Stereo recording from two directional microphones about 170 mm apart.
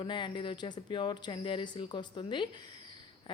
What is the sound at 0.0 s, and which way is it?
A woman's voice, 30° left (ahead or behind).